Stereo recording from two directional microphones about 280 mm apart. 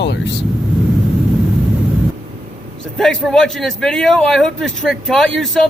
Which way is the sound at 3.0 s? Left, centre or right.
Centre.